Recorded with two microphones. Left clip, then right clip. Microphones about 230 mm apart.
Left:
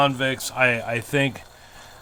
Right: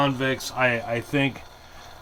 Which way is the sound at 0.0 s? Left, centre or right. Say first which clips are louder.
Left 3 dB; left.